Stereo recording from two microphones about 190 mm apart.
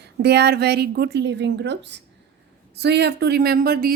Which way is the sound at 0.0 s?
60° right (ahead or behind).